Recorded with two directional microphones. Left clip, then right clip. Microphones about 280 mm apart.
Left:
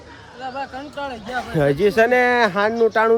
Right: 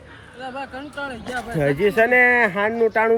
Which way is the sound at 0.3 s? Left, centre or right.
Left.